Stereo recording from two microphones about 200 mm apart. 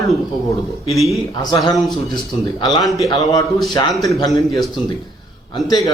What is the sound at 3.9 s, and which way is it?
Speech, centre (ahead or behind).